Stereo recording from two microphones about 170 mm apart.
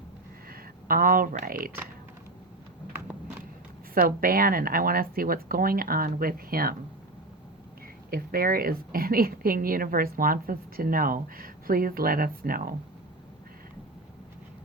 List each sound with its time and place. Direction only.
0.5 s speech: 55° right (ahead or behind)
3.9 s a woman's voice: 55° right (ahead or behind)
8.1 s a woman's voice: 60° right (ahead or behind)